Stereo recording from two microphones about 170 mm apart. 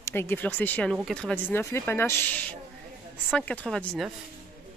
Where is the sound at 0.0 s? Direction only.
15° left (ahead or behind).